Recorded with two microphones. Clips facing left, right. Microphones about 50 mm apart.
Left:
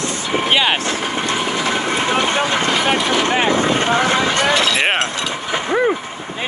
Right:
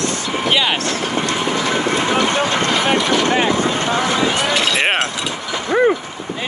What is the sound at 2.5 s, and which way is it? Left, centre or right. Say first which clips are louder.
Speech: even; centre.